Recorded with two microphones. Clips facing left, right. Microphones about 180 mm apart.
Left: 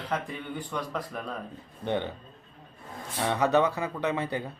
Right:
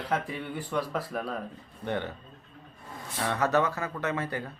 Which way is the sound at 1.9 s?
20° left (ahead or behind).